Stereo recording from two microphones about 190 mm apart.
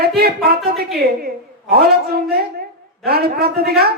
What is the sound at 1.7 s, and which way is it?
A woman's voice, 55° right (ahead or behind).